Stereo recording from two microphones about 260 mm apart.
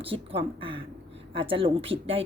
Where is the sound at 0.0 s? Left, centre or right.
Right.